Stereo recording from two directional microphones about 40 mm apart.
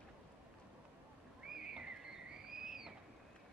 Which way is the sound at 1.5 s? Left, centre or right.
Centre.